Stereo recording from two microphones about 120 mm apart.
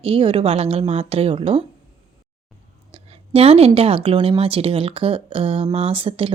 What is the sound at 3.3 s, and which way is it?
Speech, 55° right (ahead or behind).